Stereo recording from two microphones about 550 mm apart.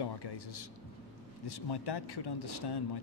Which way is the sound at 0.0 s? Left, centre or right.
Left.